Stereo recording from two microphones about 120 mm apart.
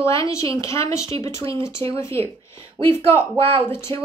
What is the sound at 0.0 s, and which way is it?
A woman's voice, 25° left (ahead or behind).